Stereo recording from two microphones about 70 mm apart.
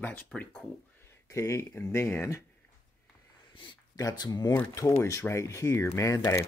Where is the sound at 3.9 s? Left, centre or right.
Left.